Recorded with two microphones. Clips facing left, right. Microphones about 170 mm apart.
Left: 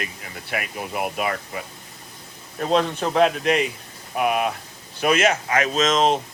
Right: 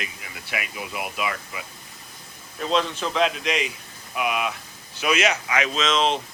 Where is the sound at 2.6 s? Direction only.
50° left (ahead or behind).